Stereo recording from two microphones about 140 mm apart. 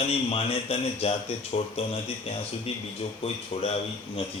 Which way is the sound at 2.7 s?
45° left (ahead or behind).